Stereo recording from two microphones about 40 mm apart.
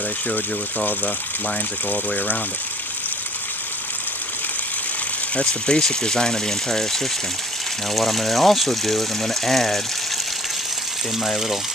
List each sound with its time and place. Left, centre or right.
0.7 s speech: left
5.3 s speech: left; by 9.8 s centre